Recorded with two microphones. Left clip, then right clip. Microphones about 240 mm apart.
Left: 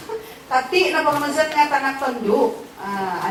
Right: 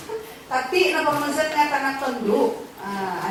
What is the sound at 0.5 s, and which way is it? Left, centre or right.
A woman's voice, centre.